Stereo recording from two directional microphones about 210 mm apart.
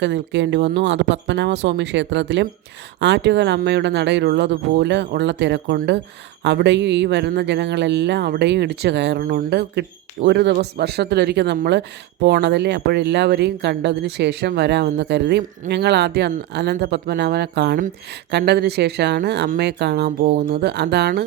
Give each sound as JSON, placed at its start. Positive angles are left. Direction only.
{"t": 0.0, "sound": "speech", "side_deg": -60}